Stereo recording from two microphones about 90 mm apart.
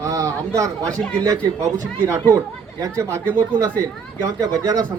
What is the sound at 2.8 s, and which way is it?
Speech, 35° right (ahead or behind).